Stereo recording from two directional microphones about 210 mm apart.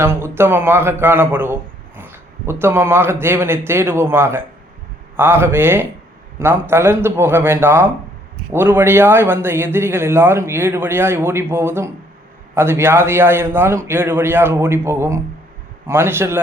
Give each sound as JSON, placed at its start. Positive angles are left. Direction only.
{"t": 0.0, "sound": "a man's voice", "side_deg": -10}